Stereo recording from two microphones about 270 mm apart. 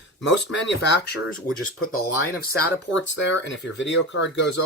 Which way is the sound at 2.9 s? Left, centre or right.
Left.